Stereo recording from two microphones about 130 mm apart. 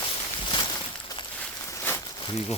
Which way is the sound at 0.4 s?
35° left (ahead or behind).